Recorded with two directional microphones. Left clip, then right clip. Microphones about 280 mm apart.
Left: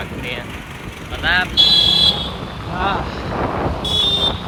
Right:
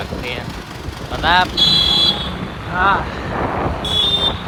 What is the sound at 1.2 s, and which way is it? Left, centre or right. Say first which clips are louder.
Speech: right 3 dB; right.